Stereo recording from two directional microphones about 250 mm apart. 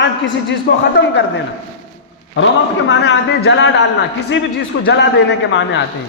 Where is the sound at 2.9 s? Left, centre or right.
Left.